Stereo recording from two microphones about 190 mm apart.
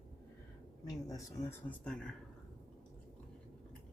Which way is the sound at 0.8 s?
20° left (ahead or behind).